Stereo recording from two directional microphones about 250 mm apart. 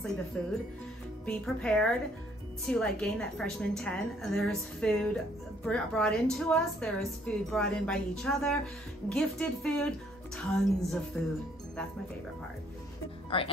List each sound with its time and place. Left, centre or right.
0.3 s a woman's voice: centre
13.3 s speech: left